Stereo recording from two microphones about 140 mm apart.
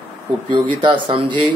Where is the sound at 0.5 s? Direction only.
35° right (ahead or behind).